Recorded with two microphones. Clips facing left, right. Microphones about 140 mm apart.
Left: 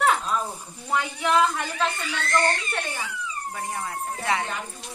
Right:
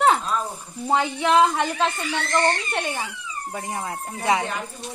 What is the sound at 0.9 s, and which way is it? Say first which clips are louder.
A woman's voice: right 4 dB; 25° right (ahead or behind).